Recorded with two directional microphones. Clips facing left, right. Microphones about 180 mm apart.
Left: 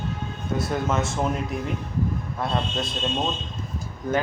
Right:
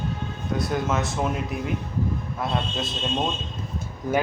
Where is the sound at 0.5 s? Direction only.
Centre (ahead or behind).